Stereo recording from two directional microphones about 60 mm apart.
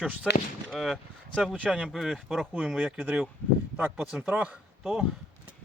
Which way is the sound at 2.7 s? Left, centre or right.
Right.